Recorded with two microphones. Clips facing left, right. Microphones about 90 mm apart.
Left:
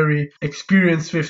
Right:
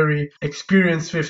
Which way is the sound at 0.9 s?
25° left (ahead or behind).